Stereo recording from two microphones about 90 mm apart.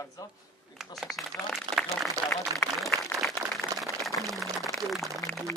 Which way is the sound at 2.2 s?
40° right (ahead or behind).